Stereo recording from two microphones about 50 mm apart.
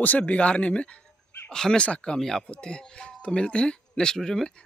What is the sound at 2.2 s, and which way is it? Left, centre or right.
Speech, centre.